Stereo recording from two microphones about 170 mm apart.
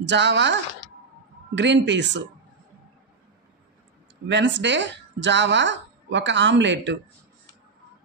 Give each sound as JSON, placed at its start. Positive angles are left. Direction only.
{"t": 0.0, "sound": "speech", "side_deg": -90}
{"t": 4.3, "sound": "speech", "side_deg": -90}